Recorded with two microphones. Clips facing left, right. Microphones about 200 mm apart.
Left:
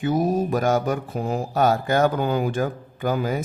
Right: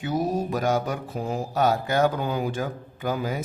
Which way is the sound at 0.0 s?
50° left (ahead or behind).